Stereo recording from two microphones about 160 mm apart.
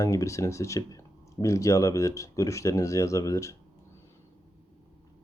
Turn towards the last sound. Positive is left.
turn(degrees=20)  # may be behind; listen again after turning